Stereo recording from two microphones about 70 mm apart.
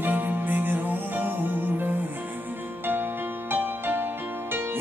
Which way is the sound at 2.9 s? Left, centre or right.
Right.